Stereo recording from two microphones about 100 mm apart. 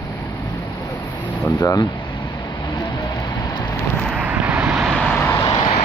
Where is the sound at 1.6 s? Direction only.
40° left (ahead or behind).